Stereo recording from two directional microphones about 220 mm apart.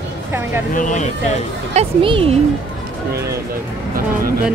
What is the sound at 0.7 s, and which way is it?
Speech, 35° left (ahead or behind).